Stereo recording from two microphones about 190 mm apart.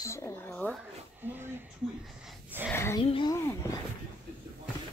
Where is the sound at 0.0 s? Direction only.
15° left (ahead or behind).